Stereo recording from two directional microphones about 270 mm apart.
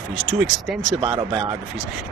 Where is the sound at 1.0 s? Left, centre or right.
Right.